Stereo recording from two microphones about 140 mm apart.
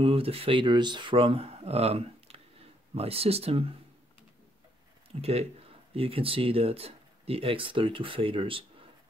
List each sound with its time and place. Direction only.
0.0 s speech: 40° right (ahead or behind)
5.2 s speech: 45° right (ahead or behind)